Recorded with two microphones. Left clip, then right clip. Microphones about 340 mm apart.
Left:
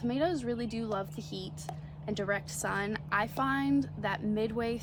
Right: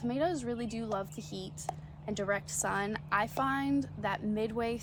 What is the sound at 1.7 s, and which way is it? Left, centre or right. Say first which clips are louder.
Speech: right 7 dB; centre.